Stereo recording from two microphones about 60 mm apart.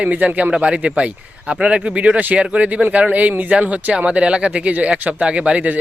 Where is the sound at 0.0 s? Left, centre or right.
Right.